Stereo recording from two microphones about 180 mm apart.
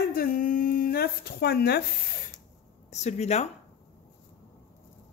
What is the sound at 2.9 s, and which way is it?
Speech, 40° left (ahead or behind).